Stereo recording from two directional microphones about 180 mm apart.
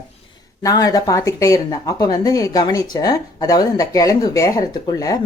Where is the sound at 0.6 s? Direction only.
20° left (ahead or behind).